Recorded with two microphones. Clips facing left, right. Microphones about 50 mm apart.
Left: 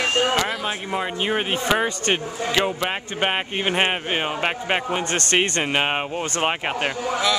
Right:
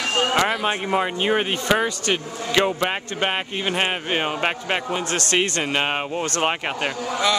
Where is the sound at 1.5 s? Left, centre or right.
Centre.